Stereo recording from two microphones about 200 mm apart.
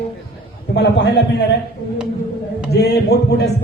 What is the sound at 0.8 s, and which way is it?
Speech, 55° left (ahead or behind).